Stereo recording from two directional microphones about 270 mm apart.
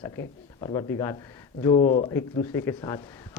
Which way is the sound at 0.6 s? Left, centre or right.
Centre.